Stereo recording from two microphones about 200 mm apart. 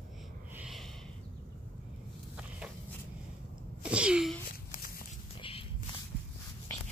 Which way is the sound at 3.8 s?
5° right (ahead or behind).